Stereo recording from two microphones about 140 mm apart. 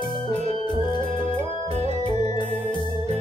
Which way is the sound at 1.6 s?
50° right (ahead or behind).